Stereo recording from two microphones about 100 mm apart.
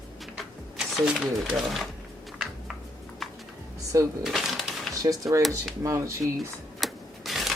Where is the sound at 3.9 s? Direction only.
30° right (ahead or behind).